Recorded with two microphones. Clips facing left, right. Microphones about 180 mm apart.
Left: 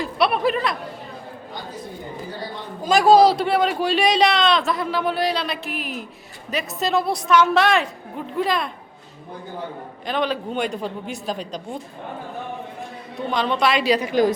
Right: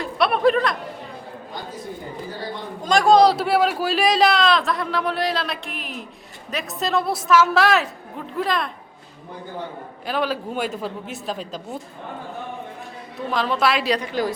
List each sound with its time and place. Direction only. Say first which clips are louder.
0.0 s a sound: right 2 dB; centre (ahead or behind)
2.8 s a man's voice: left 1 dB; 5° left (ahead or behind)
10.1 s a man's voice: left 1 dB; 5° right (ahead or behind)
13.3 s a man's voice: left 1 dB; centre (ahead or behind)
14.1 s a woman's voice: left 6 dB; 20° left (ahead or behind)